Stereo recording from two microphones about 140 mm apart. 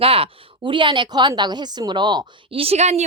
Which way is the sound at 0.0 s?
45° right (ahead or behind).